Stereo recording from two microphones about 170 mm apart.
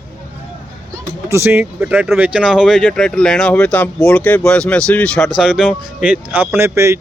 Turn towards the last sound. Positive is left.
turn(degrees=-15)  # may be behind; listen again after turning